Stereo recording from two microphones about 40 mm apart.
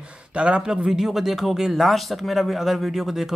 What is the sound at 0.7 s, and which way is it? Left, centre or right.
Speech, centre.